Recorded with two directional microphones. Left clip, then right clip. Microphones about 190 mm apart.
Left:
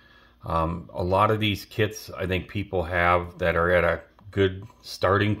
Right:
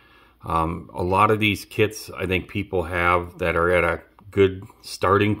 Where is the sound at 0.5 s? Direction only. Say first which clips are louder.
Right 3 dB; 40° right (ahead or behind).